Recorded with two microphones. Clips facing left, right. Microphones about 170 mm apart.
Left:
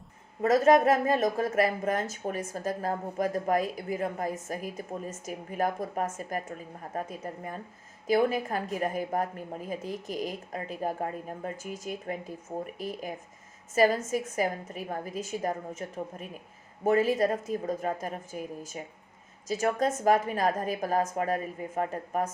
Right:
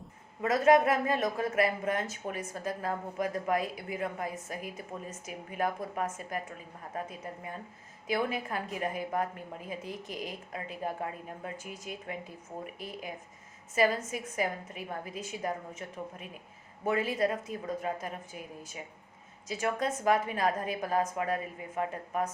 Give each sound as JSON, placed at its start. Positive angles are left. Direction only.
{"t": 0.4, "sound": "speech", "side_deg": 45}